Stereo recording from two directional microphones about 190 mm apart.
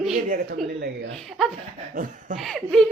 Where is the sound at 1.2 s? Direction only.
Centre (ahead or behind).